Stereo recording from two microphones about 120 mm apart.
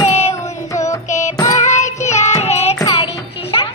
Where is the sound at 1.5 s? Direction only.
80° left.